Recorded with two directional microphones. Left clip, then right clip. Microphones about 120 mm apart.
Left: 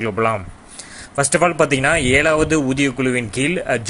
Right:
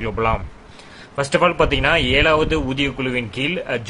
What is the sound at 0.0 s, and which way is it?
Speech, 30° left (ahead or behind).